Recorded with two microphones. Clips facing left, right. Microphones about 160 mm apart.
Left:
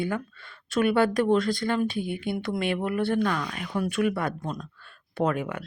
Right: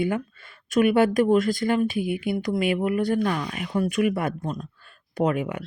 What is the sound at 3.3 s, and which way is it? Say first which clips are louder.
Speech: right 2 dB; 15° right (ahead or behind).